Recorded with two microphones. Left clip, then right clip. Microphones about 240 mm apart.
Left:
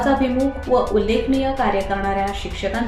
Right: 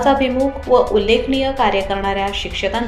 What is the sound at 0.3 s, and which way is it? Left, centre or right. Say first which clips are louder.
Speech: right 3 dB; centre.